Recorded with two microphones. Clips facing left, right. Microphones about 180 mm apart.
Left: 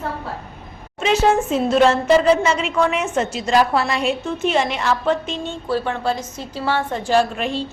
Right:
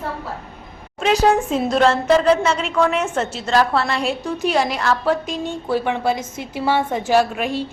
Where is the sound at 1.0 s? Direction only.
Centre (ahead or behind).